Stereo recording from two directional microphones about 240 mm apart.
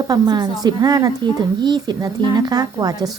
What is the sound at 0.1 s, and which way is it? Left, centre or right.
Speech, centre.